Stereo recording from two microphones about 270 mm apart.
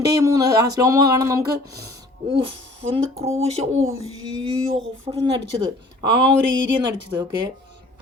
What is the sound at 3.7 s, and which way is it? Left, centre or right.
Speech, right.